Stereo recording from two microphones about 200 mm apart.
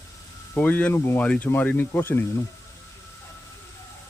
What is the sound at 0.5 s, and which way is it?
Speech, 5° left (ahead or behind).